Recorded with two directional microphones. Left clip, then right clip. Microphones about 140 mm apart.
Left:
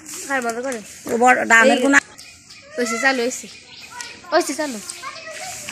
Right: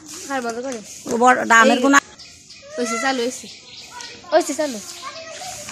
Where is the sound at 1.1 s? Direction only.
5° left (ahead or behind).